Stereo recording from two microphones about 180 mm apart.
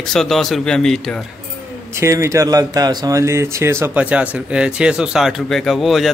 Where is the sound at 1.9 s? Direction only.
15° right (ahead or behind).